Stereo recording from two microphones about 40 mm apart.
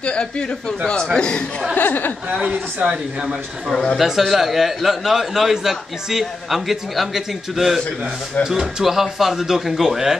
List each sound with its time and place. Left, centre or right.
0.0 s speech: left
1.8 s speech: left
2.2 s speech: right
2.9 s a man's voice: centre
3.7 s a man's voice: centre
4.0 s a man's voice: centre